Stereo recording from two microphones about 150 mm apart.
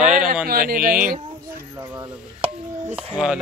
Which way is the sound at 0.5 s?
85° right.